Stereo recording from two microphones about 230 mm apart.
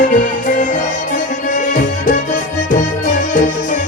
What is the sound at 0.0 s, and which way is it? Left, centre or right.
Music, left.